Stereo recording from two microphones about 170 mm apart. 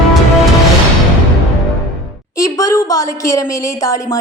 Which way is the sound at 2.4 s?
20° left (ahead or behind).